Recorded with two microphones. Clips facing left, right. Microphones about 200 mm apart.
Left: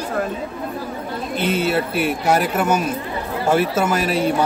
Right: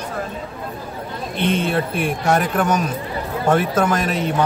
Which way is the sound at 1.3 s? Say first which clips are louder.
Even; 5° left (ahead or behind).